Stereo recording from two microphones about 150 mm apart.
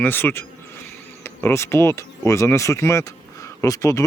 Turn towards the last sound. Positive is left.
turn(degrees=20)  # may be behind; listen again after turning